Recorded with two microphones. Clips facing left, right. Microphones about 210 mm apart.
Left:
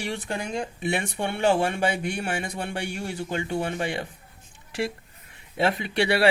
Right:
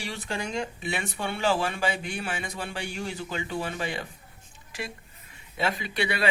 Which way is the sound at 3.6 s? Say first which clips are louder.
Left 4 dB; 55° left (ahead or behind).